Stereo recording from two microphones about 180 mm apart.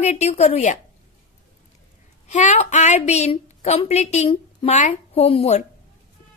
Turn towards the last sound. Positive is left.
turn(degrees=35)  # may be behind; listen again after turning